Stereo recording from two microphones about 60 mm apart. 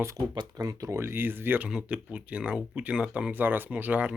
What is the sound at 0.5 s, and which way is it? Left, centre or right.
Speech, right.